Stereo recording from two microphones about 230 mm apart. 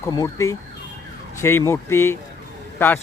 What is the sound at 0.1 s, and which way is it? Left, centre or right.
Speech, centre.